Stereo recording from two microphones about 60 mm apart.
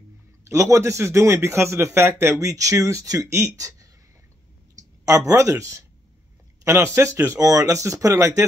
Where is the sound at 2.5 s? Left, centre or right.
Right.